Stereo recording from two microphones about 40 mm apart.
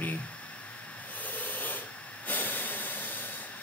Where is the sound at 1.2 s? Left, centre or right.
Left.